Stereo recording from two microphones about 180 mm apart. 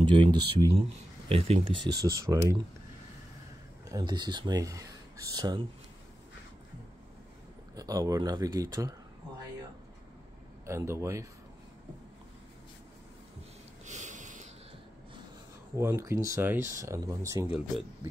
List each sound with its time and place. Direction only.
0.0 s speech: 25° right (ahead or behind)
1.9 s speech: 60° right (ahead or behind)
2.1 s speech: 20° right (ahead or behind)
3.9 s speech: 25° right (ahead or behind)
7.7 s speech: 20° right (ahead or behind)
10.6 s speech: 15° right (ahead or behind)
13.8 s sniff: 40° right (ahead or behind)
15.7 s speech: 15° right (ahead or behind)